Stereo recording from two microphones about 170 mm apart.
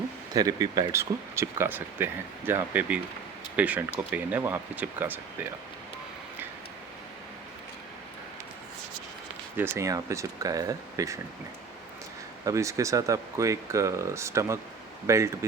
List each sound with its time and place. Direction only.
0.3 s speech: 20° right (ahead or behind)
9.6 s speech: 15° right (ahead or behind)
12.5 s speech: 20° right (ahead or behind)